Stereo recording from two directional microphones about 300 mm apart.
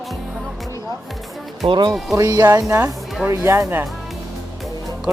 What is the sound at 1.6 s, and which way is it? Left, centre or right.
Speech, centre.